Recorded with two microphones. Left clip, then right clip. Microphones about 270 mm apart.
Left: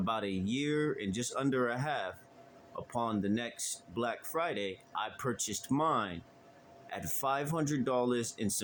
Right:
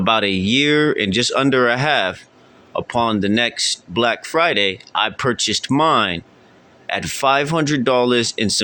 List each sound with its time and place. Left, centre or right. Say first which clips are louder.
0.0 s speech: right 18 dB; left